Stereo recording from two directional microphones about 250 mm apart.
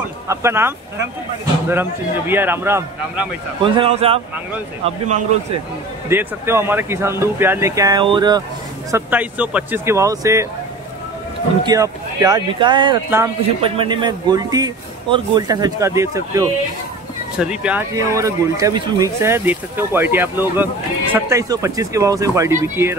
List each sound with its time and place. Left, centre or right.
0.3 s a man's voice: centre
3.6 s speech: right
6.0 s a man's voice: centre
8.9 s a man's voice: centre
11.6 s a man's voice: centre